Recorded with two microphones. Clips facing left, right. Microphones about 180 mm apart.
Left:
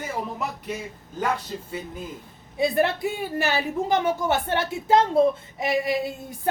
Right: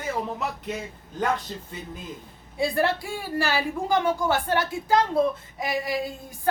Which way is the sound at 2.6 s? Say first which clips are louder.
Left 2 dB; 20° left (ahead or behind).